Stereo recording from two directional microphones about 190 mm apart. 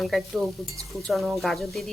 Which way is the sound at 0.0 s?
Centre (ahead or behind).